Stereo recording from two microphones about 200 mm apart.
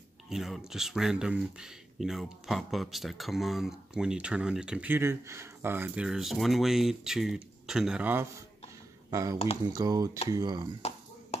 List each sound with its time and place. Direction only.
0.3 s speech: centre (ahead or behind); by 10.7 s 20° right (ahead or behind)